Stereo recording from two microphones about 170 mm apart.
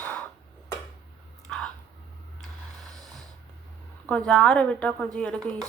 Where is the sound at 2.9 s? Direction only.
Centre (ahead or behind).